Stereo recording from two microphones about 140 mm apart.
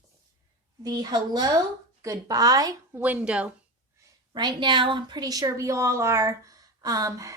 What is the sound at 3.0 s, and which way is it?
Speech, 10° right (ahead or behind).